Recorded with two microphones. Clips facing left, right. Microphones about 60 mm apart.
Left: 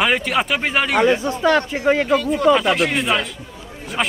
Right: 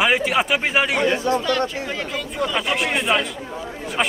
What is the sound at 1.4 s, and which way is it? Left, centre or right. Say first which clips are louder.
Speech: left 6 dB; left.